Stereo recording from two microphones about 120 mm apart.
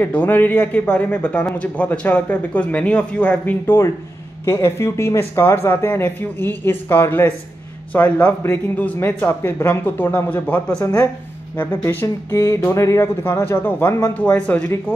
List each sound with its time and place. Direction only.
0.0 s a man's voice: 15° left (ahead or behind)